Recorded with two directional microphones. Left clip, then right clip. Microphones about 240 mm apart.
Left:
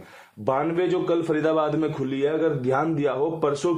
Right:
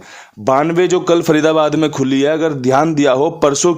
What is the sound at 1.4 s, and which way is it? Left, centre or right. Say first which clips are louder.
Speech: right 10 dB; right.